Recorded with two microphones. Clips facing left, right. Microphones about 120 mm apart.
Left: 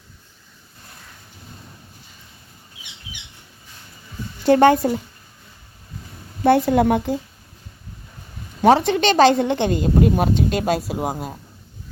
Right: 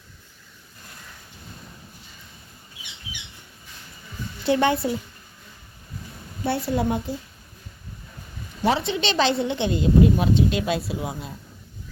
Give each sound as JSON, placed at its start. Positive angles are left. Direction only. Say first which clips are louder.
{"t": 4.4, "sound": "speech", "louder": "left 7 dB", "side_deg": 45}
{"t": 6.4, "sound": "speech", "louder": "left 9 dB", "side_deg": 55}
{"t": 8.9, "sound": "speech", "louder": "left 8 dB", "side_deg": 50}